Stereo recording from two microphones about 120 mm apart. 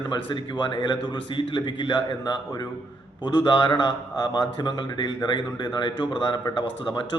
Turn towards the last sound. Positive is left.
turn(degrees=40)  # may be behind; listen again after turning